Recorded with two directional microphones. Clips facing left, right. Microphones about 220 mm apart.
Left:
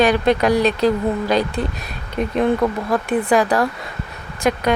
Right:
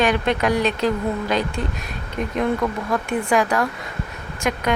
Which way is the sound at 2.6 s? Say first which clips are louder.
Left 4 dB; 30° left (ahead or behind).